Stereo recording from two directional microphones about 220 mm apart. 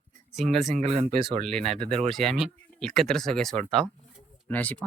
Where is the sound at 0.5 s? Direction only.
Centre (ahead or behind).